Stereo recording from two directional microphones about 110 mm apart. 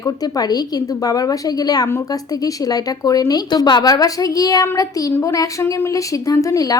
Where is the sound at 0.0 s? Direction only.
35° left (ahead or behind).